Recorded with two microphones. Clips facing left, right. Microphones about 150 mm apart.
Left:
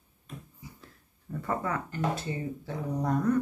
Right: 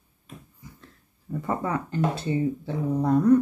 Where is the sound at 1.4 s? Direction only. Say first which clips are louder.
Right 3 dB; 20° right (ahead or behind).